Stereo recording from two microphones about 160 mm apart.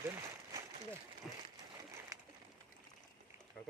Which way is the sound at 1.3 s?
Centre (ahead or behind).